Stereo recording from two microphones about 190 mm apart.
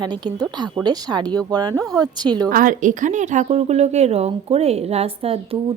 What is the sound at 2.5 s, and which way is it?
Speech, 45° right (ahead or behind).